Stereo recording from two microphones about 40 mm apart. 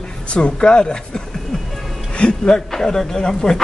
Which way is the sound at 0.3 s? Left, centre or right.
Left.